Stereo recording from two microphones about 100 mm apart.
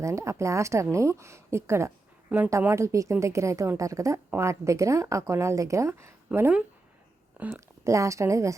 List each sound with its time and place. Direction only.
0.0 s a woman's voice: 30° right (ahead or behind)
7.5 s a woman's voice: 30° right (ahead or behind)